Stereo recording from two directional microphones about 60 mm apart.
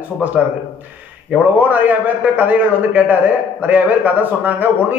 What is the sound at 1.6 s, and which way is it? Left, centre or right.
A man's voice, right.